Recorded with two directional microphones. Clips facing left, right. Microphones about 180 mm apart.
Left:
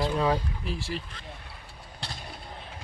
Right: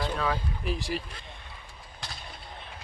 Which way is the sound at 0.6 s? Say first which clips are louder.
Right 2 dB; 15° right (ahead or behind).